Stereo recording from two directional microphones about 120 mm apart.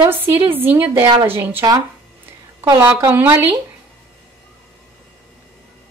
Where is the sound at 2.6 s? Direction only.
30° right (ahead or behind).